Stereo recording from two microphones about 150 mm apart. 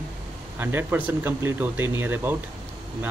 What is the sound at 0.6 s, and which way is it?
Speech, 15° right (ahead or behind).